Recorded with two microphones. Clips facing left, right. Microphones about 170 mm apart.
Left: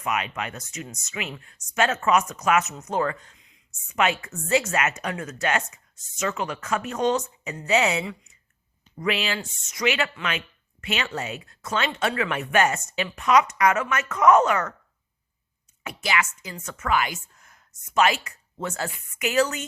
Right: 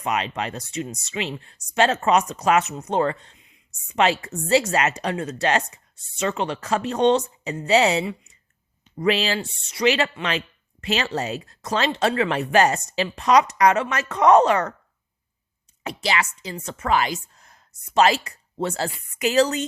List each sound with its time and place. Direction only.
0.0 s speech: 35° right (ahead or behind)
3.7 s speech: 35° right (ahead or behind)
15.8 s speech: 35° right (ahead or behind)